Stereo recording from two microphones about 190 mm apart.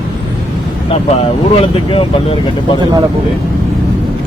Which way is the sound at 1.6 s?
30° left (ahead or behind).